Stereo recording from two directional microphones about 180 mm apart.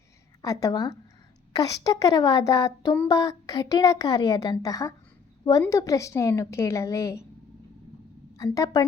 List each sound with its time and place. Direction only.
0.4 s a woman's voice: 20° left (ahead or behind)
8.4 s speech: 20° left (ahead or behind)